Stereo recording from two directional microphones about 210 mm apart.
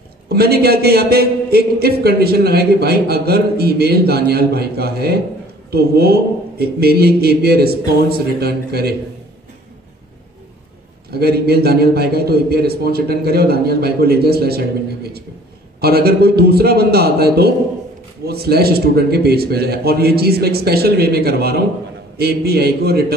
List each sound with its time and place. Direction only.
0.3 s a man's voice: 50° right (ahead or behind)
11.1 s a man's voice: 50° right (ahead or behind)
15.8 s a man's voice: 50° right (ahead or behind)